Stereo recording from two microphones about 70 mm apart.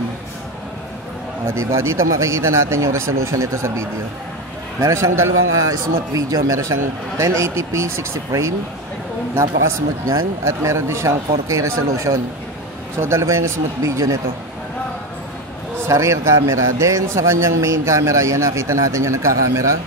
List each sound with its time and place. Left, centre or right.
1.7 s a man's voice: right
5.7 s a man's voice: right
10.0 s a man's voice: right
15.9 s a man's voice: right